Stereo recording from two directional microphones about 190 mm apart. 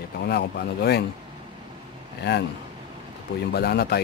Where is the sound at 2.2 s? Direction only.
60° left (ahead or behind).